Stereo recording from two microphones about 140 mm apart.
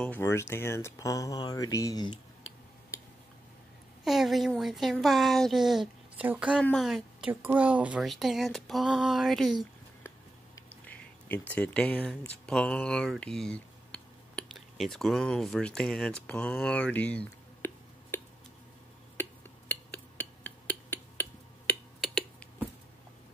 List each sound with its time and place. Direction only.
0.0 s speech: 15° left (ahead or behind)
4.0 s a woman's voice: centre (ahead or behind)
6.6 s a woman's voice: centre (ahead or behind)
10.7 s a sound: 15° left (ahead or behind)
12.4 s speech: 10° left (ahead or behind)
19.1 s a sound: 15° left (ahead or behind)